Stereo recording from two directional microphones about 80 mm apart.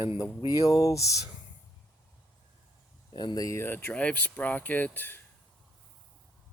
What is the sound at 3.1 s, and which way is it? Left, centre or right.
Speech, left.